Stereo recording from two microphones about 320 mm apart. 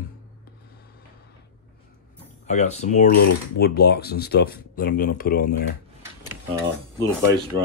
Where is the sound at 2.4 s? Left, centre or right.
Left.